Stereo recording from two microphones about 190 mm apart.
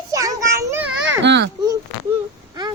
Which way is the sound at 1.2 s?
65° right (ahead or behind).